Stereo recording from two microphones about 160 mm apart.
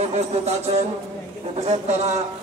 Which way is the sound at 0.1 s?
40° right (ahead or behind).